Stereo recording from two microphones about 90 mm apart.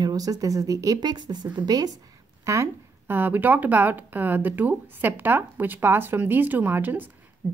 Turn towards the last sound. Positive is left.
turn(degrees=-25)  # may be behind; listen again after turning